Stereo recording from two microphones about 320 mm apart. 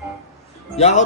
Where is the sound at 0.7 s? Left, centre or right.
Left.